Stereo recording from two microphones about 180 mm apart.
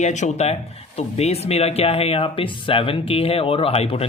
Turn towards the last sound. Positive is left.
turn(degrees=35)  # may be behind; listen again after turning